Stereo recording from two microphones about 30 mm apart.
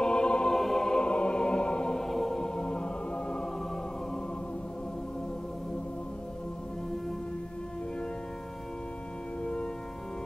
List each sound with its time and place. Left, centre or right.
0.0 s music: left
0.5 s music: centre
0.8 s music: left
2.0 s music: centre; by 3.4 s left
9.4 s music: left